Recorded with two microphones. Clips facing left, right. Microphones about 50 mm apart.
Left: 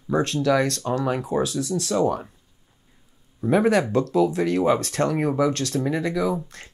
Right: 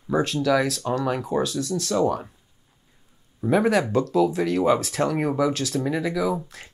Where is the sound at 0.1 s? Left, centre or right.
Centre.